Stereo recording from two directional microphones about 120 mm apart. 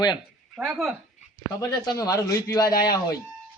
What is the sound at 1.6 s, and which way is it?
A man's voice, 30° left (ahead or behind).